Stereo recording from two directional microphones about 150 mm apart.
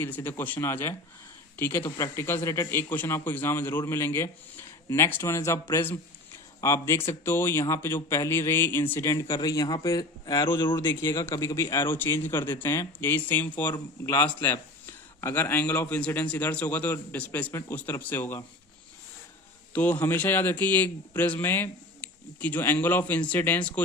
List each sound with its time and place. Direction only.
0.0 s a man's voice: 15° left (ahead or behind); by 10.8 s 30° left (ahead or behind)
10.8 s a man's voice: 20° left (ahead or behind)
19.7 s a man's voice: 10° left (ahead or behind)